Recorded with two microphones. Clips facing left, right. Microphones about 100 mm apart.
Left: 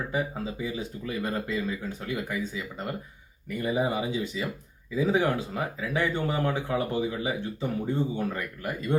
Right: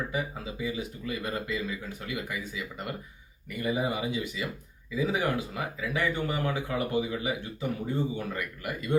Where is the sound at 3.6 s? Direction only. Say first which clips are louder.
Left 2 dB; 35° left (ahead or behind).